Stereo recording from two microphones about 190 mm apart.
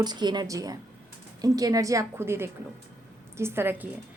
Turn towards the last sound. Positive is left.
turn(degrees=-10)  # may be behind; listen again after turning